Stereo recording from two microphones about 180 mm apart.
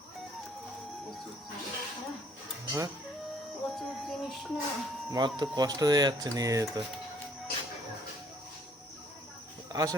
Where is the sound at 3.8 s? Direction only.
Centre (ahead or behind).